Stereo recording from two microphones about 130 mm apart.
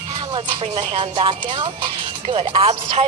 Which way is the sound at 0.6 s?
55° right (ahead or behind).